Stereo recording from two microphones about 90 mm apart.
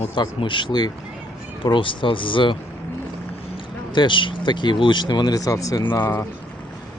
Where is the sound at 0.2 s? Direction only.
65° left (ahead or behind).